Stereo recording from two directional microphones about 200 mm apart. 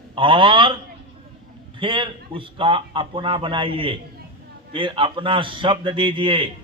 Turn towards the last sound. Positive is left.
turn(degrees=-25)  # may be behind; listen again after turning